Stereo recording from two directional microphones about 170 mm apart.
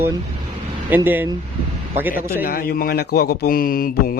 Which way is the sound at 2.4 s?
60° left (ahead or behind).